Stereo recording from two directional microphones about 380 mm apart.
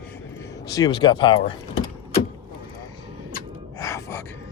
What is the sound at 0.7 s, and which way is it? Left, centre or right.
Speech, centre.